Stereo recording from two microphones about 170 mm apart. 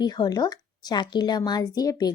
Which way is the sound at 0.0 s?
25° left (ahead or behind).